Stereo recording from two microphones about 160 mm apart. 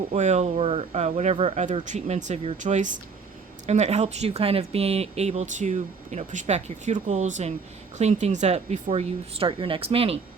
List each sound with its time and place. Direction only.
0.1 s a woman's voice: 45° right (ahead or behind)